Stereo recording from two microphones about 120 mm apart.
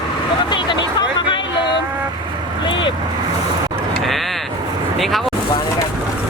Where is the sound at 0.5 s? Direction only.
40° left (ahead or behind).